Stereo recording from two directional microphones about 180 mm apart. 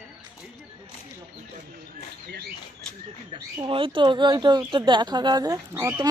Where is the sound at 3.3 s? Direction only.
25° right (ahead or behind).